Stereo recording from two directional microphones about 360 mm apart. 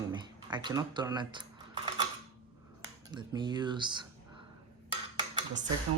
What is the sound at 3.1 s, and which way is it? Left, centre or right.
Speech, centre.